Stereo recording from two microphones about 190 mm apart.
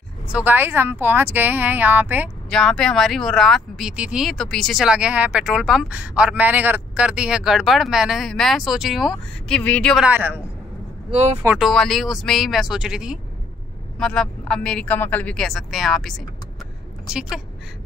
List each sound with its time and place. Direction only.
0.3 s speech: 10° right (ahead or behind)
2.5 s speech: 5° left (ahead or behind)
10.0 s speech: 10° right (ahead or behind)
11.1 s speech: 35° right (ahead or behind)
11.4 s a woman's voice: centre (ahead or behind)